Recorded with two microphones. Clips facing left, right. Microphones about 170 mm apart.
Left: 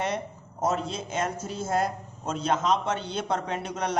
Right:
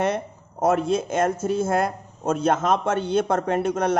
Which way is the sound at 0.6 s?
60° right (ahead or behind).